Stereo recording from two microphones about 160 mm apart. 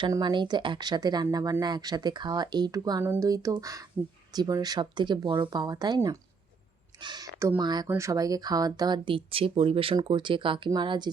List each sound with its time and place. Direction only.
0.1 s speech: 30° right (ahead or behind)
7.3 s speech: 15° right (ahead or behind)